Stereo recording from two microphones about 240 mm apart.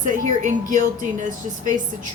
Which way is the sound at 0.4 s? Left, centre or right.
Right.